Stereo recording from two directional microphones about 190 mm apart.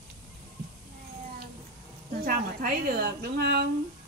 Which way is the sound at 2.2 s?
50° right (ahead or behind).